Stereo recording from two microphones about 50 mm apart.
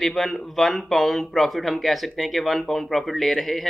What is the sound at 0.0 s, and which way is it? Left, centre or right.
Speech, centre.